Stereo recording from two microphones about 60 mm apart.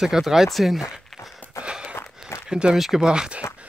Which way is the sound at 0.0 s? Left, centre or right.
Centre.